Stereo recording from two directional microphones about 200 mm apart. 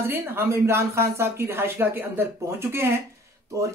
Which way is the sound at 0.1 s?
10° right (ahead or behind).